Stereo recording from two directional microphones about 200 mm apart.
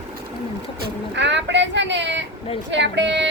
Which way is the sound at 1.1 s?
60° right (ahead or behind).